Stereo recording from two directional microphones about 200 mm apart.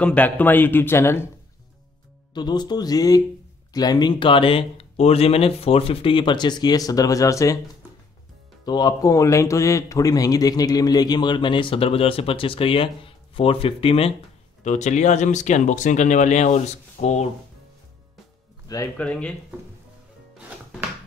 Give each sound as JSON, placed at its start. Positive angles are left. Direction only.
{"t": 0.0, "sound": "speech", "side_deg": 5}
{"t": 2.3, "sound": "a man's voice", "side_deg": 20}
{"t": 8.6, "sound": "a man's voice", "side_deg": 20}
{"t": 18.7, "sound": "speech", "side_deg": 15}
{"t": 19.0, "sound": "speech", "side_deg": 5}